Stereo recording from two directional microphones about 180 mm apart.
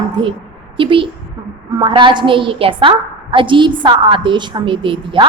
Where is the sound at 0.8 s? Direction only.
30° right (ahead or behind).